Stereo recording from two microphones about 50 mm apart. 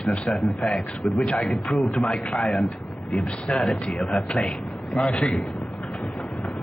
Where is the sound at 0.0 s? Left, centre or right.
Left.